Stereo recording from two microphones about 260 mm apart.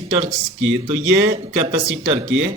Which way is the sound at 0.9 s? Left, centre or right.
Right.